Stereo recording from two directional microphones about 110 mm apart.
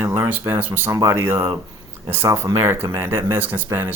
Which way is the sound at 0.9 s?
35° right (ahead or behind).